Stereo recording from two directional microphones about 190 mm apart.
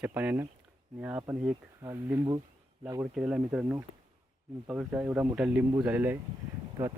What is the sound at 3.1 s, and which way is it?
Speech, 5° right (ahead or behind).